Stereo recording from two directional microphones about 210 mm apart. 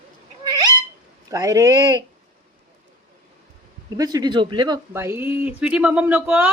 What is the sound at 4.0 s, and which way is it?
Speech, 20° right (ahead or behind).